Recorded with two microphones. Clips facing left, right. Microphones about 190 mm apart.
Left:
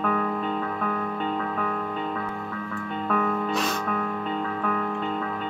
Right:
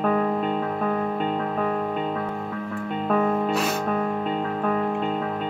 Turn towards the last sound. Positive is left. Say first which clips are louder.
# right 3 dB
turn(degrees=-35)  # may be behind; listen again after turning